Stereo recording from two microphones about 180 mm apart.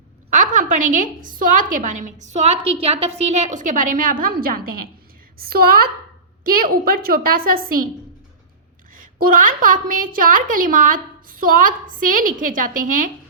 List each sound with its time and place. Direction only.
0.3 s a woman's voice: 45° right (ahead or behind)
9.1 s a woman's voice: 50° right (ahead or behind)